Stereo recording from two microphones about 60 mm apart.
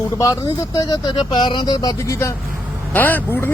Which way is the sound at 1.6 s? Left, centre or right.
Left.